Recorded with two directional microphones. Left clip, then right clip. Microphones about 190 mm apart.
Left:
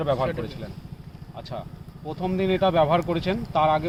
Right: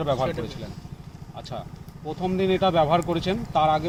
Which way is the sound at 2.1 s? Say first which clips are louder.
Right 1 dB; 15° left (ahead or behind).